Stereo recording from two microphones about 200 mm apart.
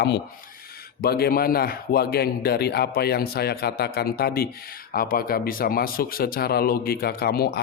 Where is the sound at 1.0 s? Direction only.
50° left (ahead or behind).